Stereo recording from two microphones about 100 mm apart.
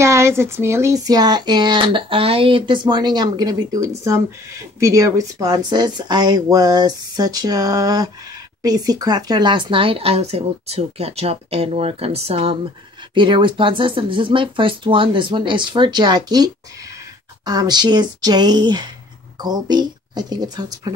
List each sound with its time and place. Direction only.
0.0 s speech: 30° right (ahead or behind); by 12.5 s 85° right
13.1 s a woman's voice: 55° right (ahead or behind)